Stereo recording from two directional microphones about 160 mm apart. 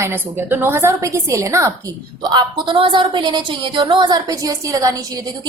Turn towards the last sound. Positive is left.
turn(degrees=-25)  # may be behind; listen again after turning